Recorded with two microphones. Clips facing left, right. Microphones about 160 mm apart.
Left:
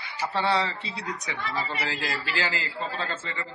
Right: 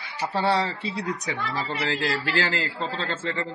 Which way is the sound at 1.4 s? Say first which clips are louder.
Right 2 dB; 60° right (ahead or behind).